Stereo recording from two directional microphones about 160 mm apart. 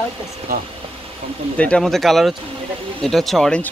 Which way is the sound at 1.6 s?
5° left (ahead or behind).